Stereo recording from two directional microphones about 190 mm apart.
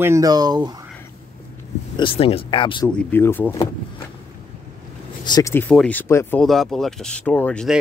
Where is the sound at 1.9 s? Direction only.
30° left (ahead or behind).